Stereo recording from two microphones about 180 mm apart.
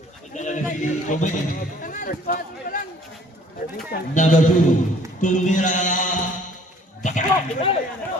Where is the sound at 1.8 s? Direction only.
50° left (ahead or behind).